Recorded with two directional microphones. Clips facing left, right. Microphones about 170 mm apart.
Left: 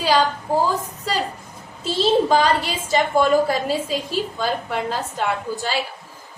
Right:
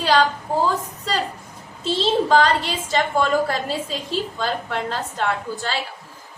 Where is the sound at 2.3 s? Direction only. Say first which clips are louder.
Even; 10° left (ahead or behind).